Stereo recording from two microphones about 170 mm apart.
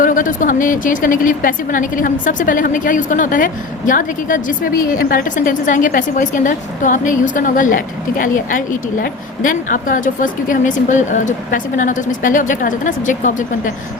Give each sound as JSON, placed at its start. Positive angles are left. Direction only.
{"t": 0.0, "sound": "a woman's voice", "side_deg": 50}